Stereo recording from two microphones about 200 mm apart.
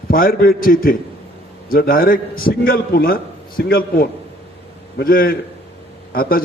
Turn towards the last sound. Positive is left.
turn(degrees=45)  # may be behind; listen again after turning